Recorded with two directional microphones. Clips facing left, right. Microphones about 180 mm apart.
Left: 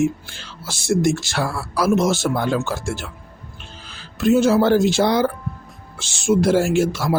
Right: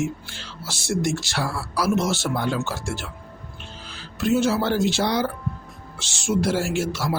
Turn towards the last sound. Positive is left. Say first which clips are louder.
# left 6 dB
turn(degrees=50)  # may be behind; listen again after turning